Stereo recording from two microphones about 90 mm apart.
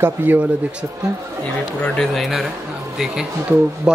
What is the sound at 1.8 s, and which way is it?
Speech, 5° left (ahead or behind).